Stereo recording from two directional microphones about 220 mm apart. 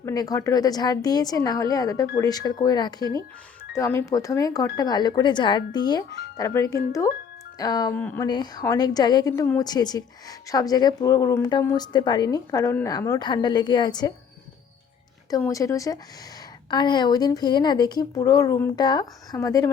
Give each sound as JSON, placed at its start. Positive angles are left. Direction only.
{"t": 0.0, "sound": "a woman's voice", "side_deg": 15}
{"t": 15.3, "sound": "a woman's voice", "side_deg": 15}